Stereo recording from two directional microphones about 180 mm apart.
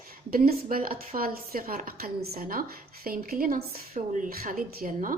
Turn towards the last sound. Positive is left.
turn(degrees=-50)  # may be behind; listen again after turning